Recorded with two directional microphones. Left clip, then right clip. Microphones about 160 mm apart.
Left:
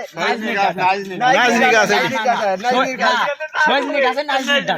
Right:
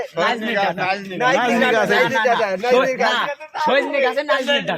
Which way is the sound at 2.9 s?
30° right (ahead or behind).